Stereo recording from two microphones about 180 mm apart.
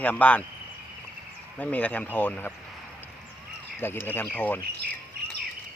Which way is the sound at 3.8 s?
10° left (ahead or behind).